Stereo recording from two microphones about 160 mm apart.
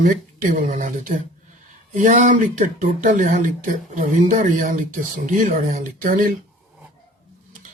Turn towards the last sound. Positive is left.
turn(degrees=-60)  # may be behind; listen again after turning